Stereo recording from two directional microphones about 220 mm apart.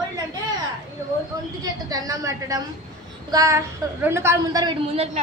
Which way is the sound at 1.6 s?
15° right (ahead or behind).